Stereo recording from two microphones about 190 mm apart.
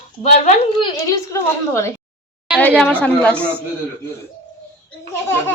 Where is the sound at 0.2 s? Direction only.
30° left (ahead or behind).